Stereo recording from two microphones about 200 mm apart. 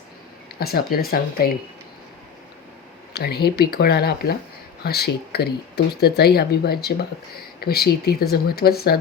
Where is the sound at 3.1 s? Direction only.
50° left (ahead or behind).